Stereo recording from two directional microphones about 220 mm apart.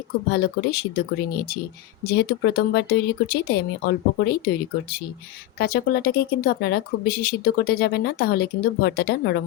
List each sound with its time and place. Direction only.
0.3 s speech: 45° left (ahead or behind)